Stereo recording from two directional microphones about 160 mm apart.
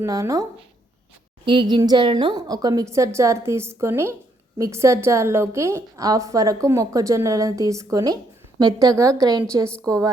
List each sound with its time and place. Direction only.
0.0 s a woman's voice: 20° right (ahead or behind)
1.5 s a woman's voice: 30° right (ahead or behind)